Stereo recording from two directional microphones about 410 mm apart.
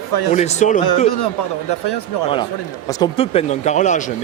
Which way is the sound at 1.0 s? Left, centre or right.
Left.